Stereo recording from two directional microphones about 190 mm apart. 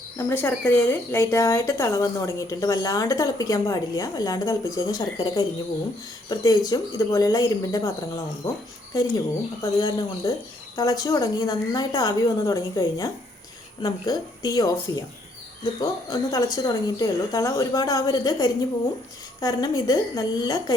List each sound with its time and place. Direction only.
0.2 s speech: 10° left (ahead or behind)